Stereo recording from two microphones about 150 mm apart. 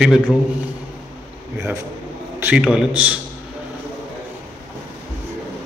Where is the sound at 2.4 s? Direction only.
10° right (ahead or behind).